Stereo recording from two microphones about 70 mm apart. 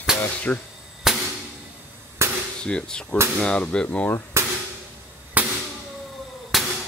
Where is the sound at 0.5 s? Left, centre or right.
Left.